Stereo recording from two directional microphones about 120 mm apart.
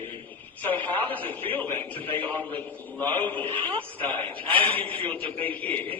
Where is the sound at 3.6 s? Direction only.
50° right (ahead or behind).